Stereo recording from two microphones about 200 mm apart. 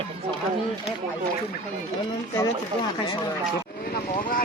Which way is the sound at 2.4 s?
20° left (ahead or behind).